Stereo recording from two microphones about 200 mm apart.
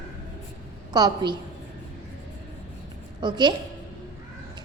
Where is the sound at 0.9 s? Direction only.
20° right (ahead or behind).